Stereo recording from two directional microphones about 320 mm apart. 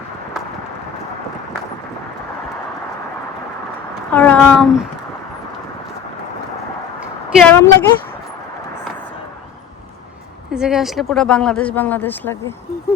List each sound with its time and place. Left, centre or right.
4.1 s speech: centre
7.3 s speech: centre
10.5 s speech: centre